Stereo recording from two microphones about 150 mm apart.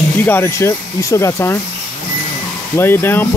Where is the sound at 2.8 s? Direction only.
15° left (ahead or behind).